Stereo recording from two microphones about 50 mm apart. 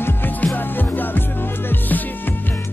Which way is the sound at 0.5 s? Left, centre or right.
Left.